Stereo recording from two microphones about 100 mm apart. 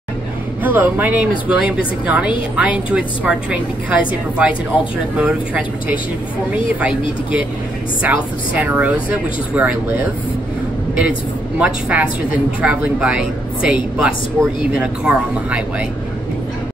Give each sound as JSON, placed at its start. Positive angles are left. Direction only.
{"t": 0.7, "sound": "a woman's voice", "side_deg": -20}
{"t": 11.0, "sound": "a woman's voice", "side_deg": -15}